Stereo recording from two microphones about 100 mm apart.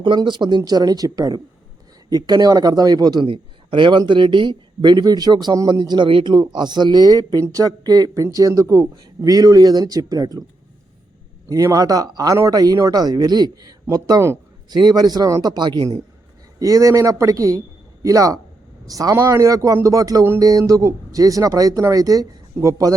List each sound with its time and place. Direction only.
0.0 s speech: 50° right (ahead or behind)
3.2 s speech: 60° right (ahead or behind); by 10.4 s 40° right (ahead or behind)
11.4 s speech: 35° right (ahead or behind)
16.6 s speech: 35° right (ahead or behind)